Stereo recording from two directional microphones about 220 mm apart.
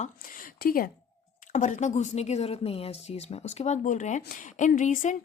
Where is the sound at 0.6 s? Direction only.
40° left (ahead or behind).